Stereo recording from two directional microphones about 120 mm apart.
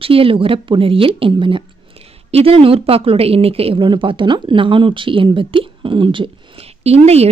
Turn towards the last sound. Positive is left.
turn(degrees=-60)  # may be behind; listen again after turning